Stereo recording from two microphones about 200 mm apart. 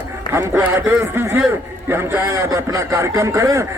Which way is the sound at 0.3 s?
10° right (ahead or behind).